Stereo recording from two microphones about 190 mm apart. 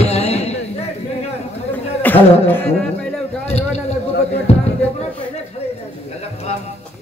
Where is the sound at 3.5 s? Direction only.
35° left (ahead or behind).